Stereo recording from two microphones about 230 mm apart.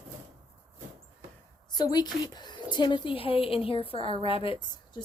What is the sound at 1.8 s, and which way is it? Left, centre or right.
A woman's voice, centre.